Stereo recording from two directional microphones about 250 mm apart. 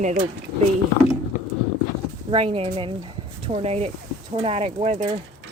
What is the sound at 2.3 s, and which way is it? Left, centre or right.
Speech, right.